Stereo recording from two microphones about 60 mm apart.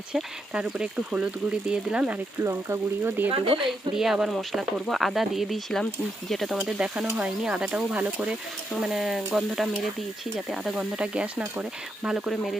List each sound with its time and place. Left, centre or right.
0.1 s speech: centre
2.4 s speech: right
3.7 s speech: centre; by 8.3 s right
8.7 s speech: centre